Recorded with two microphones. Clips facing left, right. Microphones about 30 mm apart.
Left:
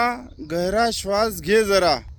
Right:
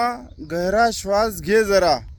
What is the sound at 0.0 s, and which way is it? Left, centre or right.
Speech, left.